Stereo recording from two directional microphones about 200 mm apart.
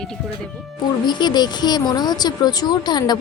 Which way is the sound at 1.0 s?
20° left (ahead or behind).